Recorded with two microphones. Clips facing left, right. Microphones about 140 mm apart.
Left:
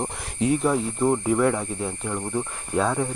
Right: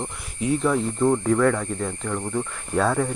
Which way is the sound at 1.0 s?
10° left (ahead or behind).